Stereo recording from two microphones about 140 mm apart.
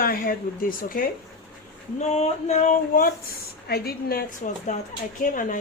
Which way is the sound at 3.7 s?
90° left.